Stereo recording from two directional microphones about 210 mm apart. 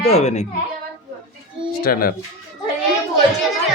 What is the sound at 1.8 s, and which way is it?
Speech, 45° left (ahead or behind).